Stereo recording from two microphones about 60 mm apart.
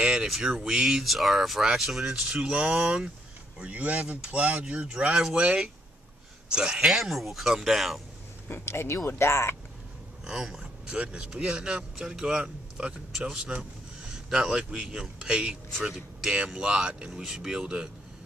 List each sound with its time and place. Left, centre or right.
0.0 s speech: centre
8.5 s speech: left
10.2 s speech: centre